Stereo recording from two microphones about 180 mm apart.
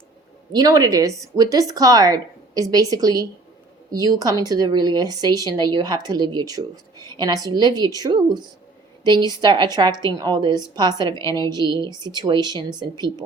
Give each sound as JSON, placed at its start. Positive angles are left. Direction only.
{"t": 0.5, "sound": "a woman's voice", "side_deg": -20}